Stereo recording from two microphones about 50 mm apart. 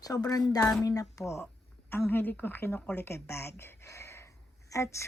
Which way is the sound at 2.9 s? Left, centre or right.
Left.